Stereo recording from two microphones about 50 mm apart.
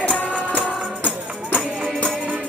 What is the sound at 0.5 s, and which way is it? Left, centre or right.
Music, left.